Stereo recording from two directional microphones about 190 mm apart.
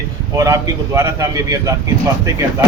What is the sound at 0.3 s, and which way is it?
A man's voice, 15° right (ahead or behind).